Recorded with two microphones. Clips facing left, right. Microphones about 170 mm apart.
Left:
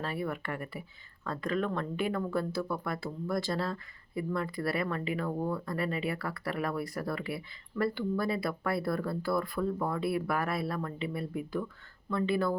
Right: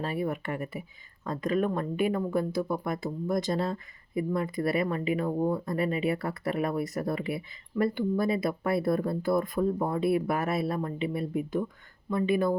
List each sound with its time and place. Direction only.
0.0 s speech: 20° right (ahead or behind)